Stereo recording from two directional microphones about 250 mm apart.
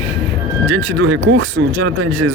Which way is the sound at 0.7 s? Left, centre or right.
Right.